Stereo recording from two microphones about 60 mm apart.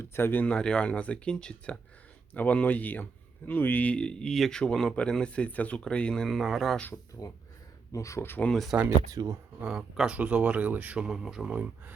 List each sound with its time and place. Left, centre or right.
0.0 s speech: left
0.4 s speech: centre
2.3 s speech: left
3.9 s speech: centre
6.2 s speech: centre
7.1 s speech: left
7.9 s speech: left
8.7 s speech: right
10.9 s speech: centre